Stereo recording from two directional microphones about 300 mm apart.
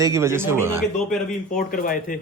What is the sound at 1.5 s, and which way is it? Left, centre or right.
Speech, left.